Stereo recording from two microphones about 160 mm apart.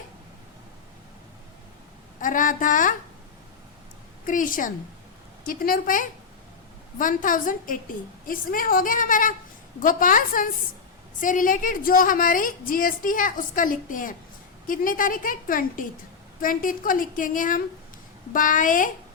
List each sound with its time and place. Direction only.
2.2 s a woman's voice: 55° left (ahead or behind)
4.3 s a woman's voice: 55° left (ahead or behind)